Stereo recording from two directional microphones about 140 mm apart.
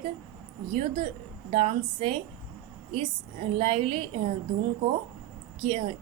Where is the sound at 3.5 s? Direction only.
45° right (ahead or behind).